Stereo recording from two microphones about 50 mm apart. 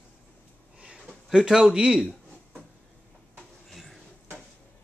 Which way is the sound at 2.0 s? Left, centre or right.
Centre.